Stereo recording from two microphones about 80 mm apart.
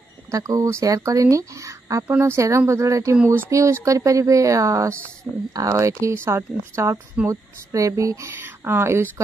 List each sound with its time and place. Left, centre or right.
0.3 s speech: right
2.0 s speech: right